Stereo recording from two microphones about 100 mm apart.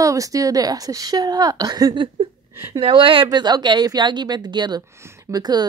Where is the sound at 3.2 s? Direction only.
45° right (ahead or behind).